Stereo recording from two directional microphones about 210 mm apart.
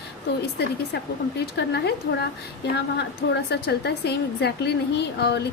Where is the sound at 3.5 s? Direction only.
50° left (ahead or behind).